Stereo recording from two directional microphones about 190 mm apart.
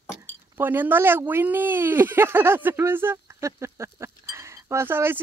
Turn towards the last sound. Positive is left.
turn(degrees=-10)  # may be behind; listen again after turning